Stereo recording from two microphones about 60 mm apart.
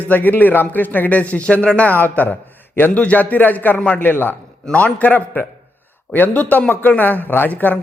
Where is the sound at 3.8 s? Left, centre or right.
Left.